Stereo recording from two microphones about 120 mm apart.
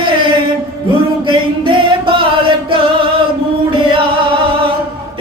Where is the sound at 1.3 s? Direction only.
45° right (ahead or behind).